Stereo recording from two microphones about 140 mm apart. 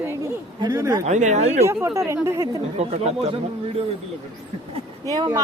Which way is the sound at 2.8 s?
50° right (ahead or behind).